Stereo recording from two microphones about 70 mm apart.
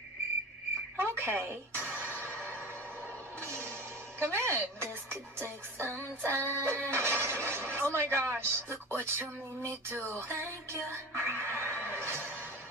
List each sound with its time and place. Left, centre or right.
0.9 s music: right
4.2 s speech: right
10.1 s music: right